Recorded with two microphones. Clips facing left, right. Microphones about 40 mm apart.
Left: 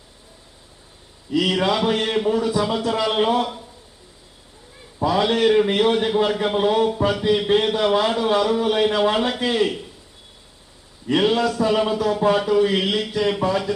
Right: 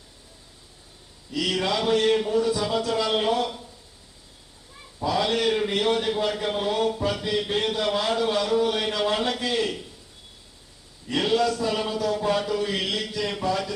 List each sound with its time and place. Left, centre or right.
1.3 s a man's voice: left
5.0 s a man's voice: left
11.1 s a man's voice: left